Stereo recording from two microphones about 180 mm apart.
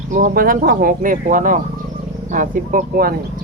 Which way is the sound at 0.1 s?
50° right (ahead or behind).